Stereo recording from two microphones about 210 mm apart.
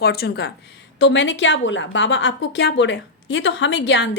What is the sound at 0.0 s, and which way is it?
A woman's voice, 50° left (ahead or behind).